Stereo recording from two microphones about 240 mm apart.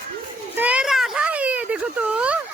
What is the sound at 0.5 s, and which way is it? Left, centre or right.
Children playing, centre.